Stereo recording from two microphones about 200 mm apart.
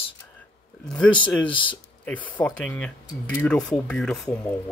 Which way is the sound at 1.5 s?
25° left (ahead or behind).